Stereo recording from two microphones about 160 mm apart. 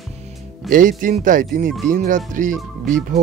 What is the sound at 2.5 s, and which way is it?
Speech, centre (ahead or behind).